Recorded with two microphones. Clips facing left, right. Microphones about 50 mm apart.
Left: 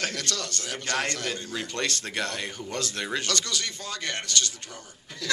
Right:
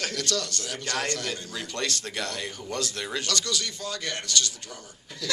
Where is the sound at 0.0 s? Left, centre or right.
Left.